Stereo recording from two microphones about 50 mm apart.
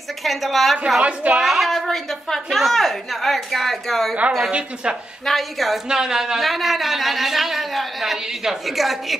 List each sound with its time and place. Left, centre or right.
0.2 s speech: centre
4.5 s speech: right
5.2 s speech: centre
5.9 s speech: centre